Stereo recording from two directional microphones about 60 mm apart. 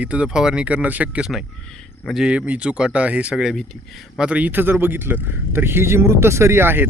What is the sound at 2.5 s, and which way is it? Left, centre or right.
Speech, centre.